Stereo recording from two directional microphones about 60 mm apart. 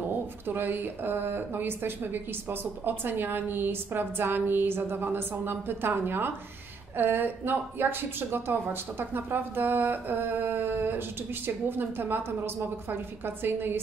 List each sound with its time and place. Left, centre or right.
0.5 s speech: right